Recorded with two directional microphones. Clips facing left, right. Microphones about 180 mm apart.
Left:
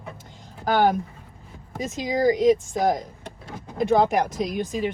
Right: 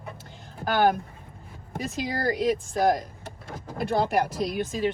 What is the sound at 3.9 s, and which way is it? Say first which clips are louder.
Speech: left 5 dB; 90° left.